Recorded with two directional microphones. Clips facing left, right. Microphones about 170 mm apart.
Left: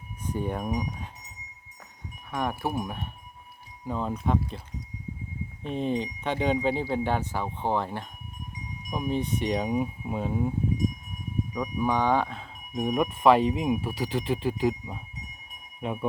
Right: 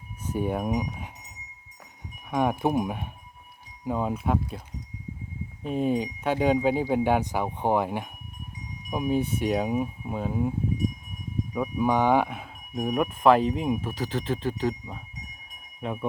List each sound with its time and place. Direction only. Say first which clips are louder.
0.3 s speech: right 3 dB; 10° right (ahead or behind)
2.3 s speech: right 5 dB; 15° right (ahead or behind)
5.6 s speech: right 3 dB; 5° right (ahead or behind)
11.5 s speech: right 3 dB; 5° right (ahead or behind)
12.7 s speech: even; centre (ahead or behind)